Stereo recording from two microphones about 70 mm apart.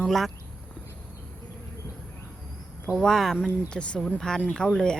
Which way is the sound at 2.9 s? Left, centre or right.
Centre.